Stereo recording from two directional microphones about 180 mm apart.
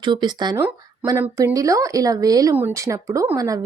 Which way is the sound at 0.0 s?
25° right (ahead or behind).